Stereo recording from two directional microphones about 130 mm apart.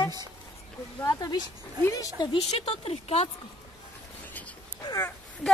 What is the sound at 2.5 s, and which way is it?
Speech, 50° left (ahead or behind).